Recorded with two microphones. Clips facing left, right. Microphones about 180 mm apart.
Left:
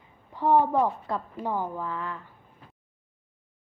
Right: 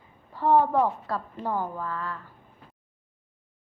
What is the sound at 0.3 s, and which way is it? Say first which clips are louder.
A woman's voice: right 1 dB; 15° left (ahead or behind).